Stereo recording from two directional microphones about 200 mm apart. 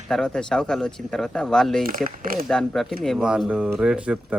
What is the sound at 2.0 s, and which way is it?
Speech, 45° right (ahead or behind).